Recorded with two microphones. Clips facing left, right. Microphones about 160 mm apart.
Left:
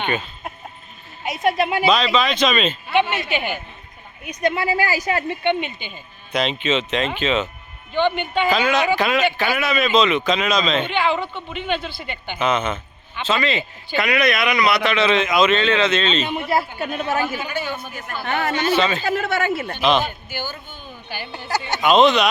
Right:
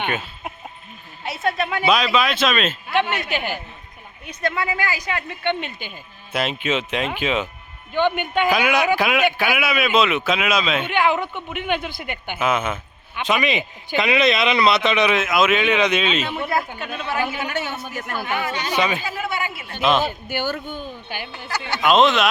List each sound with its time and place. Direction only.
0.0 s speech: 10° right (ahead or behind)
1.2 s a woman's voice: 15° left (ahead or behind)
1.9 s speech: 10° right (ahead or behind)
4.3 s a woman's voice: 15° left (ahead or behind)
4.5 s speech: 30° left (ahead or behind)
5.5 s a man's voice: centre (ahead or behind); by 15.1 s 20° right (ahead or behind)
15.1 s a man's voice: 5° right (ahead or behind)
16.5 s speech: 35° left (ahead or behind)
17.4 s a man's voice: 75° right (ahead or behind)
18.7 s a man's voice: 15° right (ahead or behind)
19.1 s speech: 65° left (ahead or behind)
19.8 s speech: centre (ahead or behind)
20.2 s a man's voice: 65° right (ahead or behind)
21.8 s speech: centre (ahead or behind)